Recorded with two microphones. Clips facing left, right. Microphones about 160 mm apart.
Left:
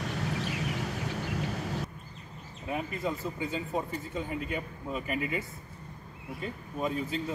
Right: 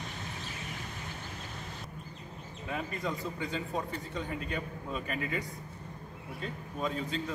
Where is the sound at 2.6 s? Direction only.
10° left (ahead or behind).